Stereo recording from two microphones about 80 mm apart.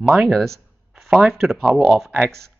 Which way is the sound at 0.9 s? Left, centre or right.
Centre.